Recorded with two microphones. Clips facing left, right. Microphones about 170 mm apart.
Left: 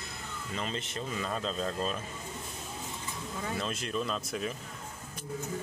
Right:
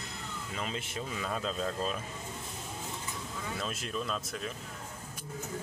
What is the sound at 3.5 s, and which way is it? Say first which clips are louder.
Speech: left 3 dB; 5° right (ahead or behind).